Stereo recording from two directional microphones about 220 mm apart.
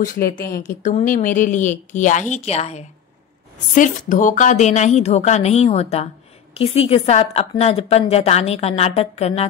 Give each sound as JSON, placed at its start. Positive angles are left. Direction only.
{"t": 0.0, "sound": "a woman's voice", "side_deg": 35}